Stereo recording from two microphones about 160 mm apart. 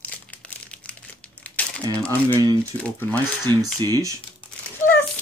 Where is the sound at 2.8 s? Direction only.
10° left (ahead or behind).